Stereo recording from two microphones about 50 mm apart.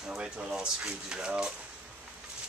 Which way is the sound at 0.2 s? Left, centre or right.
Right.